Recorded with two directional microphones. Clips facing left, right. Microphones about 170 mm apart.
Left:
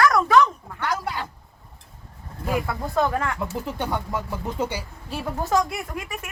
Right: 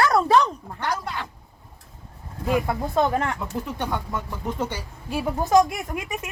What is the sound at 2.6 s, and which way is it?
Speech, 20° right (ahead or behind).